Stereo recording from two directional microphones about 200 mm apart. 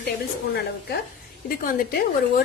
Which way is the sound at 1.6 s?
45° left (ahead or behind).